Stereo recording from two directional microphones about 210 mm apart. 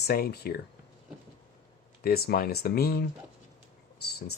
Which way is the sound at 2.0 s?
45° left (ahead or behind).